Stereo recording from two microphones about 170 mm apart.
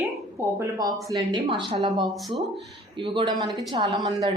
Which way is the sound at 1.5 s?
30° right (ahead or behind).